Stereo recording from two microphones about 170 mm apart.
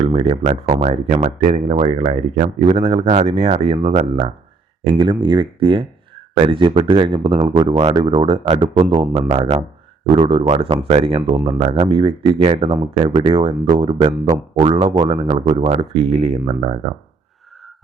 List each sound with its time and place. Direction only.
0.0 s speech: 40° right (ahead or behind)
1.7 s speech: 35° right (ahead or behind)